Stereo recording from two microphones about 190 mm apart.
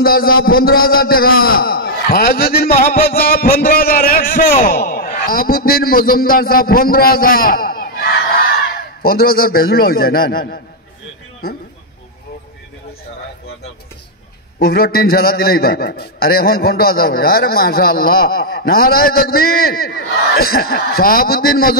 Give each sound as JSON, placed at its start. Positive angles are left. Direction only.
{"t": 0.0, "sound": "a man's voice", "side_deg": 50}
{"t": 14.6, "sound": "a man's voice", "side_deg": 50}